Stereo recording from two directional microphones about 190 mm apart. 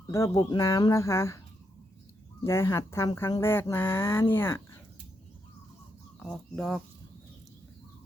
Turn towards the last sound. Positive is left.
turn(degrees=5)  # may be behind; listen again after turning